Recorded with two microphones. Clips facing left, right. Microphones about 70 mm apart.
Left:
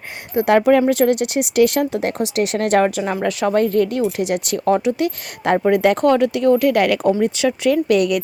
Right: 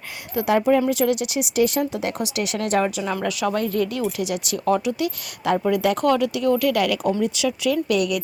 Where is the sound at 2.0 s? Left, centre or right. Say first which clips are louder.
Left 6 dB; left.